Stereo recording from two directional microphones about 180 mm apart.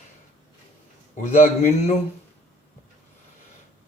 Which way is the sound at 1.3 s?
40° left (ahead or behind).